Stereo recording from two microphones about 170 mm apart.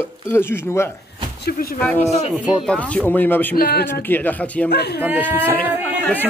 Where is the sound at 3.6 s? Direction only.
65° left (ahead or behind).